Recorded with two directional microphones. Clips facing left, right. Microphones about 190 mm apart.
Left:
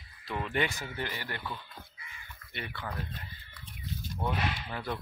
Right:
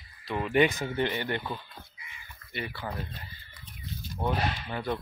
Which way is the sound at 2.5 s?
5° right (ahead or behind).